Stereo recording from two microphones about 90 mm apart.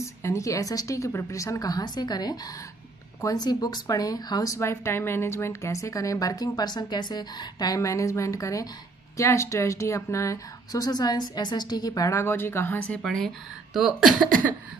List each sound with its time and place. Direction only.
0.0 s a woman's voice: 35° left (ahead or behind)
3.3 s speech: 50° left (ahead or behind)
4.6 s a woman's voice: 30° left (ahead or behind)
13.0 s speech: 5° left (ahead or behind)
13.7 s speech: 5° right (ahead or behind)